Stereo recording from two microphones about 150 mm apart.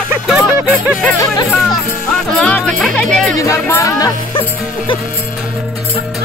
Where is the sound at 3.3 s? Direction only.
20° left (ahead or behind).